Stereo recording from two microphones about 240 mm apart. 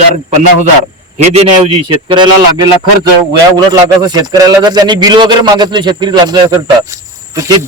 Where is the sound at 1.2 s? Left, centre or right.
Right.